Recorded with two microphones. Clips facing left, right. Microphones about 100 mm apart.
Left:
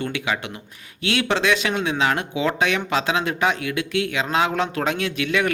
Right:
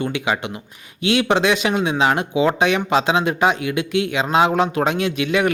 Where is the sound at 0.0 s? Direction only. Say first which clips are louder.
Right 4 dB; 20° right (ahead or behind).